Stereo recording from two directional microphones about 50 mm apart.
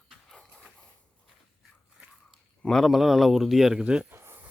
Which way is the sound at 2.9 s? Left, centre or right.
Centre.